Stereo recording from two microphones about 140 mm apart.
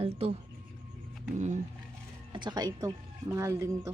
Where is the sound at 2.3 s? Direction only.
30° right (ahead or behind).